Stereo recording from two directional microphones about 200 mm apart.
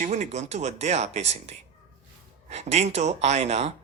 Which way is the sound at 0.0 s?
35° right (ahead or behind).